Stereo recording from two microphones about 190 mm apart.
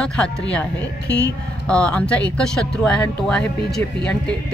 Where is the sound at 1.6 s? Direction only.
5° left (ahead or behind).